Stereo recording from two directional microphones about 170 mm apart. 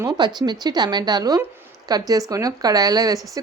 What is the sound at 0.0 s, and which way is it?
A woman's voice, 25° right (ahead or behind).